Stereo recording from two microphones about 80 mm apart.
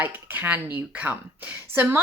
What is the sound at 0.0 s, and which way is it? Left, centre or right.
Speech, right.